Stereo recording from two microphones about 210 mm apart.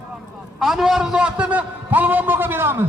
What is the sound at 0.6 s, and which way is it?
A man's voice, centre (ahead or behind).